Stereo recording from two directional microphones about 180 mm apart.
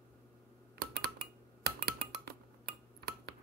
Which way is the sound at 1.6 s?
60° right (ahead or behind).